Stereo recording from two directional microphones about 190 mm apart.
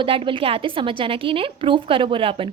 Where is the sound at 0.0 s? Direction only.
30° right (ahead or behind).